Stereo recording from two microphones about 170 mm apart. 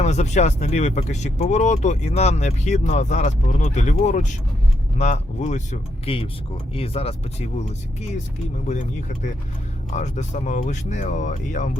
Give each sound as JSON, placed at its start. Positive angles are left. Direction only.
{"t": 0.0, "sound": "speech", "side_deg": 40}
{"t": 9.9, "sound": "speech", "side_deg": 45}